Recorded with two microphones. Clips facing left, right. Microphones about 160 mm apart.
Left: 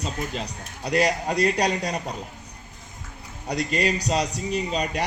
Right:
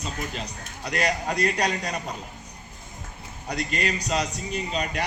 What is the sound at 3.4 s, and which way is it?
A man's voice, 35° left (ahead or behind).